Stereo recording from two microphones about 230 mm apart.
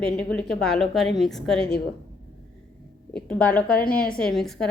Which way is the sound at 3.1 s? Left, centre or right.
Centre.